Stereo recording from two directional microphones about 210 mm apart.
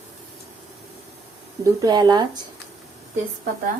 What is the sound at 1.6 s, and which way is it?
Speech, 20° right (ahead or behind).